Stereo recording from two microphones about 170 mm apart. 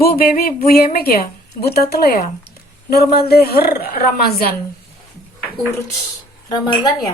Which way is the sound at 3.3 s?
65° left (ahead or behind).